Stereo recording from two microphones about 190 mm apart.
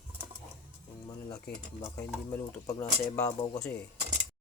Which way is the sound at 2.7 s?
15° left (ahead or behind).